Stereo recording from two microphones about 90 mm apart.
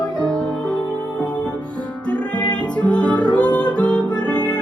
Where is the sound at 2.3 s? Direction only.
55° left (ahead or behind).